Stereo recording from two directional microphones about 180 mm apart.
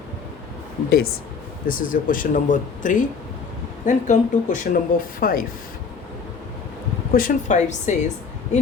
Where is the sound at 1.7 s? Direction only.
50° left (ahead or behind).